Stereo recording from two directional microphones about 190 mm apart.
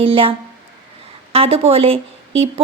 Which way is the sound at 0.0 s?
30° right (ahead or behind).